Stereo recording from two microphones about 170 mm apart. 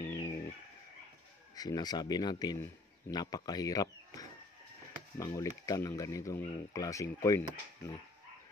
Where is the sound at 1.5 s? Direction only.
25° left (ahead or behind).